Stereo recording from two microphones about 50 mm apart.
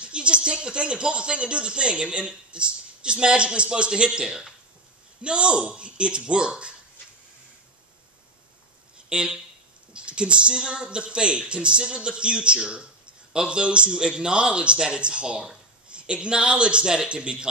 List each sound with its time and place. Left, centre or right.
0.0 s speech: right
8.9 s a sound: centre
9.9 s speech: right